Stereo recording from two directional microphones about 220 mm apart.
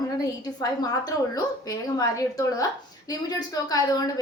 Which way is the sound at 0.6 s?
15° left (ahead or behind).